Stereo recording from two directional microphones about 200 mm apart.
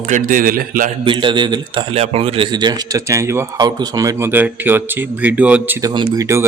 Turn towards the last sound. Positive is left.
turn(degrees=-15)  # may be behind; listen again after turning